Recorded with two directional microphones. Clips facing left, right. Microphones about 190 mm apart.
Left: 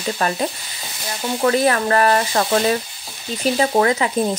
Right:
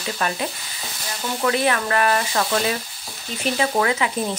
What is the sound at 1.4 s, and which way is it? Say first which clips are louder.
A woman's voice: left 4 dB; 40° left (ahead or behind).